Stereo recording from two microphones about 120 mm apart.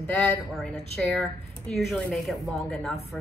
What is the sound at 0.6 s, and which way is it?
Speech, 5° left (ahead or behind).